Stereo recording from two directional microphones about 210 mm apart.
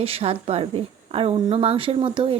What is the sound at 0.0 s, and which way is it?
A woman's voice, 30° right (ahead or behind).